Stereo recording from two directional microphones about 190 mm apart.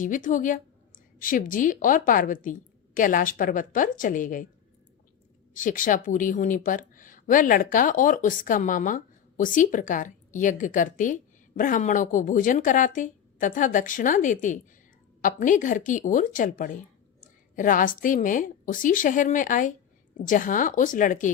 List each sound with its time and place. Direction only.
0.0 s a woman's voice: 45° left (ahead or behind)
5.5 s a woman's voice: 45° left (ahead or behind)